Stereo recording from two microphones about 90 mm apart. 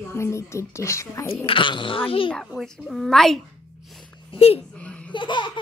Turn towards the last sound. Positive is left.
turn(degrees=60)  # may be behind; listen again after turning